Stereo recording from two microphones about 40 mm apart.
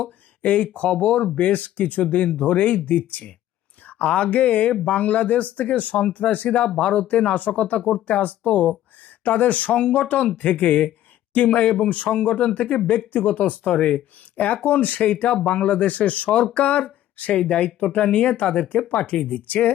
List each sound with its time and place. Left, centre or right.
0.0 s speech: left
6.7 s speech: left
15.9 s speech: left
18.9 s speech: left